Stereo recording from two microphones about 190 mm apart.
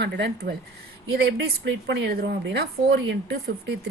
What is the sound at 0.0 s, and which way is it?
Speech, 65° right (ahead or behind).